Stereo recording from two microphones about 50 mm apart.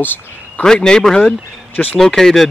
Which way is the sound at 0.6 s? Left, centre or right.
Centre.